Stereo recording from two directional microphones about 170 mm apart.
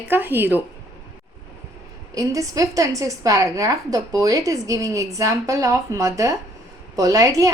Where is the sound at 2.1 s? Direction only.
20° right (ahead or behind).